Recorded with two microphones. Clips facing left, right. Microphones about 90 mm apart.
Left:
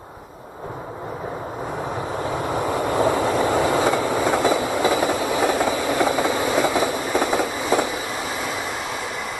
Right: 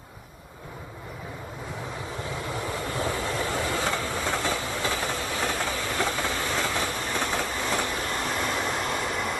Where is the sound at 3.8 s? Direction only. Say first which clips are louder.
Left 9 dB; 15° left (ahead or behind).